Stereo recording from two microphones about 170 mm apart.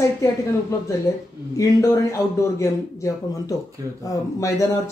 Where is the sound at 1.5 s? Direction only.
20° left (ahead or behind).